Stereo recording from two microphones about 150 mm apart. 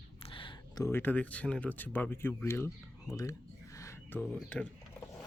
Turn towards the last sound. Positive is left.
turn(degrees=10)  # may be behind; listen again after turning